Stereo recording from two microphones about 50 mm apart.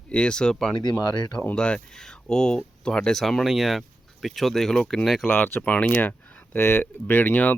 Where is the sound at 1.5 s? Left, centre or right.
Centre.